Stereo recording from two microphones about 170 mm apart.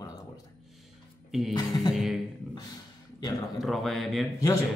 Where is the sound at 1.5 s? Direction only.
20° left (ahead or behind).